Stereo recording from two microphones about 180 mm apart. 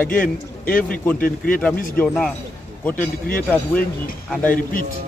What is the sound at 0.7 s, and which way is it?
Speech, 50° left (ahead or behind).